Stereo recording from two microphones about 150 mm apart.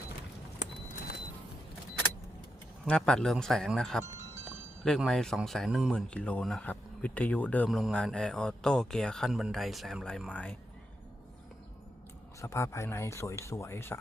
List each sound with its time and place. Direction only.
2.8 s a man's voice: 5° left (ahead or behind)
4.4 s wind chime: 5° left (ahead or behind)
4.9 s a man's voice: 5° left (ahead or behind)
12.4 s speech: 20° left (ahead or behind)